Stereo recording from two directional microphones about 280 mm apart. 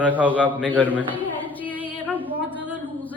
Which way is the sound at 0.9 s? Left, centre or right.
Centre.